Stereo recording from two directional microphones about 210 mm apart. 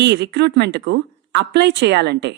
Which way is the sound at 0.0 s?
55° right (ahead or behind).